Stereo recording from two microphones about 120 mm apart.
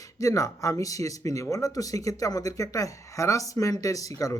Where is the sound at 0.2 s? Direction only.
30° left (ahead or behind).